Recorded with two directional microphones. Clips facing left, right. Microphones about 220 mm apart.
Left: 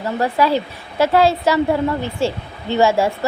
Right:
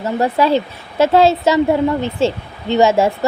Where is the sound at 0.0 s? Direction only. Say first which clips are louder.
Right 2 dB; 25° right (ahead or behind).